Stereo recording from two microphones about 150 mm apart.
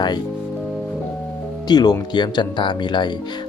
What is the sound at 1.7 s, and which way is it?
Speech, 25° left (ahead or behind).